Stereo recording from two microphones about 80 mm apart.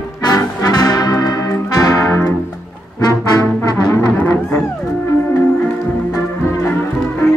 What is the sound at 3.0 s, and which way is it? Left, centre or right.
Trombone, left.